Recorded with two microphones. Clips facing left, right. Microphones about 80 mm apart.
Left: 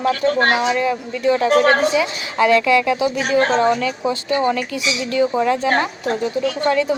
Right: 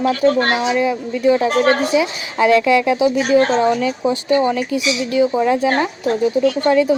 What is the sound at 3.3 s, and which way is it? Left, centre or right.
Speech, left.